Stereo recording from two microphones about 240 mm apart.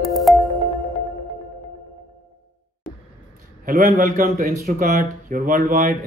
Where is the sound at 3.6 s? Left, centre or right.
Right.